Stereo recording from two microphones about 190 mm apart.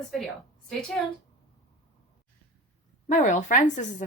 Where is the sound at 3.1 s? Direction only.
40° left (ahead or behind).